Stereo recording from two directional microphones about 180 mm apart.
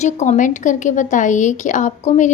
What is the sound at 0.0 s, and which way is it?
A woman's voice, 40° left (ahead or behind).